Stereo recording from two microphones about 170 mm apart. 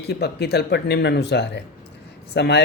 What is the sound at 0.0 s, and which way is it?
Speech, 75° left (ahead or behind).